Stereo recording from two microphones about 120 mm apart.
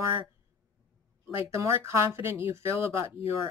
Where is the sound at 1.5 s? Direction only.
25° right (ahead or behind).